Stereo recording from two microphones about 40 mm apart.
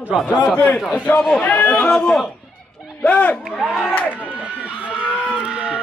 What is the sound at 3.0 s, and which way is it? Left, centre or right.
Speech, left.